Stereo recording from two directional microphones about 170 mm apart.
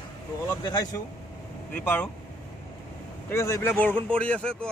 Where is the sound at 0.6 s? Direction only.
25° left (ahead or behind).